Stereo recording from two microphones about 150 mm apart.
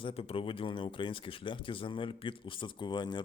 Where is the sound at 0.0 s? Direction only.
40° left (ahead or behind).